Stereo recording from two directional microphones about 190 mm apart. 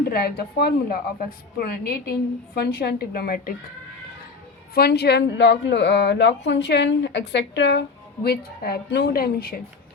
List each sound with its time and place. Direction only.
0.1 s a woman's voice: 55° left (ahead or behind)
4.7 s speech: 55° left (ahead or behind)